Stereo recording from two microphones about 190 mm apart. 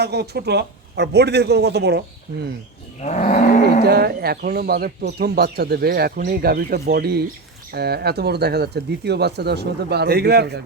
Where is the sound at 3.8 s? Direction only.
55° right (ahead or behind).